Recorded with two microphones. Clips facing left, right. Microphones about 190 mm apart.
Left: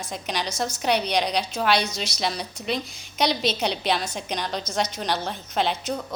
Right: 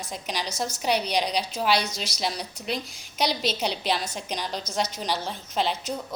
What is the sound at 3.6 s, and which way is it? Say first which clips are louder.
Speech: left 2 dB; 60° left (ahead or behind).